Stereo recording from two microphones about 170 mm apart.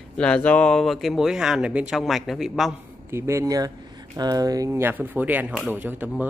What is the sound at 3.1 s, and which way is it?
Speech, 15° right (ahead or behind).